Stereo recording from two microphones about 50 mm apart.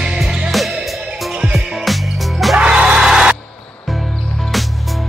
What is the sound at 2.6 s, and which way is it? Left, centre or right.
Music, centre.